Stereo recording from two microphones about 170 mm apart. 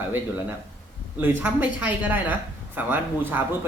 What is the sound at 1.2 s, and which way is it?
Speech, 10° right (ahead or behind).